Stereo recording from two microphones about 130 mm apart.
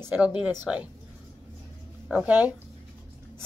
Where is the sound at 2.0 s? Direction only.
10° right (ahead or behind).